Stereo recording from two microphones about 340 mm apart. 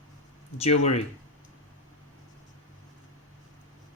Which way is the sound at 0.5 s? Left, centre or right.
Centre.